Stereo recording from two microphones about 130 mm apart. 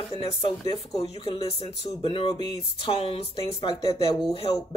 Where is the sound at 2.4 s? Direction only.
35° left (ahead or behind).